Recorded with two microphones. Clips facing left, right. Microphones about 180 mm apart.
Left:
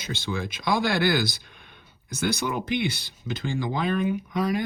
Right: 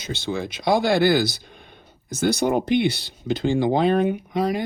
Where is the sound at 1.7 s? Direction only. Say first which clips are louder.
Right 5 dB; 50° right (ahead or behind).